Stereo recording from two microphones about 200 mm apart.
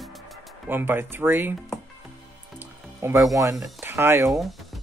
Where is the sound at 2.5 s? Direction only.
15° right (ahead or behind).